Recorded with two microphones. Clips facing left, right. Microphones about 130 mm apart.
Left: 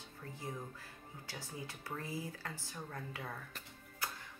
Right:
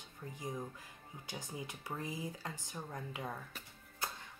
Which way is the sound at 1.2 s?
20° right (ahead or behind).